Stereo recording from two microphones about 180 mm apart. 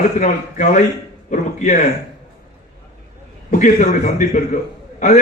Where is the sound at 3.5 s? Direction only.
45° left (ahead or behind).